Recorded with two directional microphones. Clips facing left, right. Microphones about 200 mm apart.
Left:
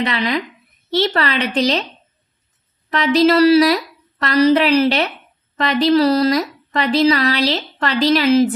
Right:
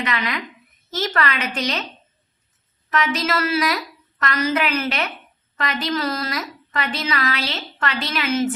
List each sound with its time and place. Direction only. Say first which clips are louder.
0.0 s speech: left 6 dB; 35° left (ahead or behind)
2.9 s speech: left 9 dB; 35° left (ahead or behind)